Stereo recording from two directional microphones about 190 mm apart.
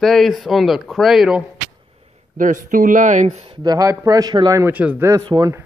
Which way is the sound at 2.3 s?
45° right (ahead or behind).